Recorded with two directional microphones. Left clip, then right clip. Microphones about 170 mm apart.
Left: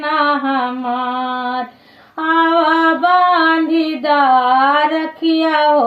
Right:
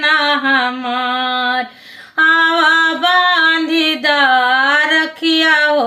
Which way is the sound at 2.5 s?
25° right (ahead or behind).